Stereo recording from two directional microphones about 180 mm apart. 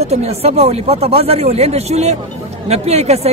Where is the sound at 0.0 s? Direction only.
35° right (ahead or behind).